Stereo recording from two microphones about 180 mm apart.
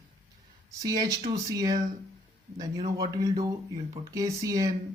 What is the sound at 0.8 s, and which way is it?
Speech, 20° right (ahead or behind).